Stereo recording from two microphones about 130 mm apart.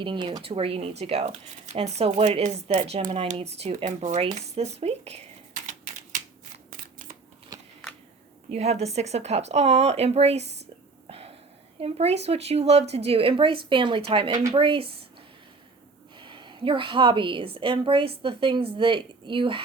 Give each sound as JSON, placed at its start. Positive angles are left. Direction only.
{"t": 0.0, "sound": "speech", "side_deg": -40}
{"t": 2.4, "sound": "a woman's voice", "side_deg": -65}
{"t": 4.2, "sound": "speech", "side_deg": -55}
{"t": 5.6, "sound": "typewriter", "side_deg": -80}
{"t": 8.4, "sound": "a woman's voice", "side_deg": -55}
{"t": 11.8, "sound": "speech", "side_deg": -50}
{"t": 16.1, "sound": "a woman's voice", "side_deg": -40}